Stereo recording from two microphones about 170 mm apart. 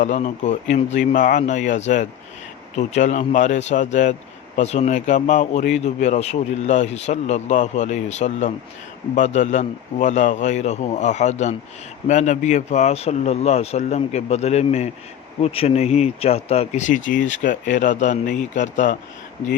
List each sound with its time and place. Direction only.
0.0 s a man's voice: 45° left (ahead or behind)